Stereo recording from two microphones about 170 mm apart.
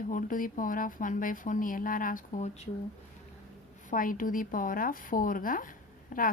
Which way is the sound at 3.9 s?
55° left (ahead or behind).